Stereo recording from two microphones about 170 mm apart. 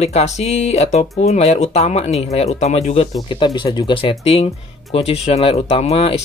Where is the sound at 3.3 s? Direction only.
30° left (ahead or behind).